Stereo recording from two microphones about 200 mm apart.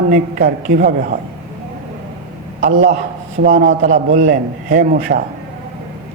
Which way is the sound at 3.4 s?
40° right (ahead or behind).